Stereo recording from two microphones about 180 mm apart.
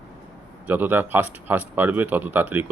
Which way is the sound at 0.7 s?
10° right (ahead or behind).